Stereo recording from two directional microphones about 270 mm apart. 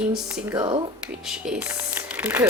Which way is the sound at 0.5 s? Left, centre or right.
Centre.